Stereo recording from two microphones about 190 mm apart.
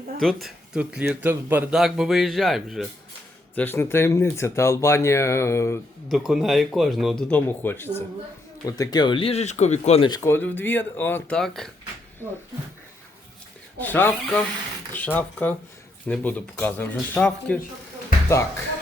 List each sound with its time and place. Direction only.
0.2 s speech: centre (ahead or behind)
3.5 s speech: 10° left (ahead or behind)
6.1 s speech: centre (ahead or behind); by 10.1 s 35° left (ahead or behind)
10.1 s speech: 15° left (ahead or behind)
13.7 s speech: 10° left (ahead or behind)